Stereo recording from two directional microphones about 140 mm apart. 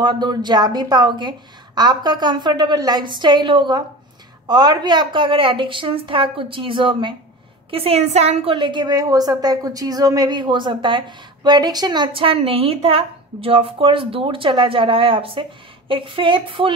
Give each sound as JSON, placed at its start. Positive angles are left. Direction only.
{"t": 0.0, "sound": "a woman's voice", "side_deg": -30}